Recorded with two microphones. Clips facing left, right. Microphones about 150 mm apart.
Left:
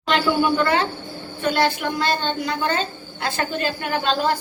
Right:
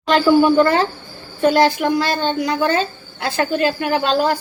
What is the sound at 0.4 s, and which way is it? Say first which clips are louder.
Speech: right 6 dB; 40° right (ahead or behind).